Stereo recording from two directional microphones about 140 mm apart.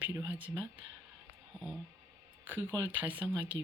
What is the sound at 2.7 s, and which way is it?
Speech, 30° right (ahead or behind).